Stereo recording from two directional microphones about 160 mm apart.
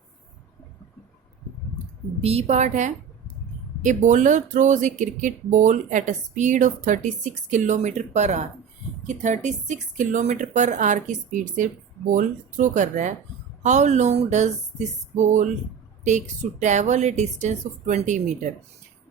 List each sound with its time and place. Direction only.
2.2 s speech: 40° right (ahead or behind)